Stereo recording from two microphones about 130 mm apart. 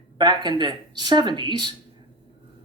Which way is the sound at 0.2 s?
35° right (ahead or behind).